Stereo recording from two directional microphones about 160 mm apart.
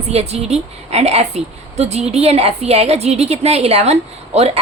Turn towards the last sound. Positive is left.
turn(degrees=-40)  # may be behind; listen again after turning